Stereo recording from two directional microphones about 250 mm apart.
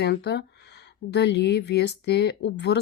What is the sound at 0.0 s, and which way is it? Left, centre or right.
Speech, left.